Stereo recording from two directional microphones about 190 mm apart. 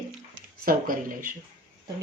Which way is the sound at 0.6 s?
50° right (ahead or behind).